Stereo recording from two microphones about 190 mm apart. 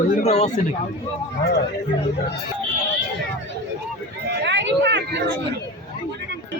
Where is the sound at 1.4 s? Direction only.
60° left (ahead or behind).